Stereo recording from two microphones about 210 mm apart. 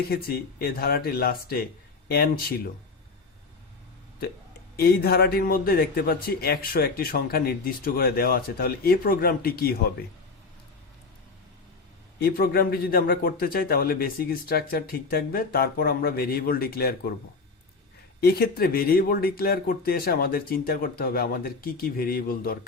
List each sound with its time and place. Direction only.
0.1 s a man's voice: 45° left (ahead or behind)
4.8 s a man's voice: 45° left (ahead or behind)
12.2 s a man's voice: 45° left (ahead or behind)
18.2 s a man's voice: 50° left (ahead or behind)